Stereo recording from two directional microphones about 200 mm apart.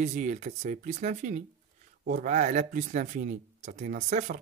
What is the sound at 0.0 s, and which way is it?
Speech, 40° right (ahead or behind).